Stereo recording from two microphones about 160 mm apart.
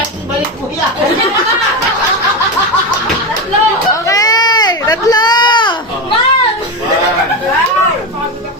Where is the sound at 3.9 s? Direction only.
20° left (ahead or behind).